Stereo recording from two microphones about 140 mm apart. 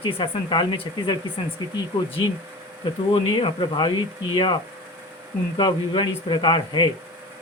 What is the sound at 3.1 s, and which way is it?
Speech, 40° left (ahead or behind).